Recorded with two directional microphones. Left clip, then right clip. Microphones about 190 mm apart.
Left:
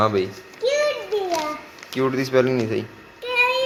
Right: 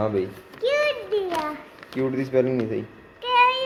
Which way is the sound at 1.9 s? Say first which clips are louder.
Left 3 dB; 5° right (ahead or behind).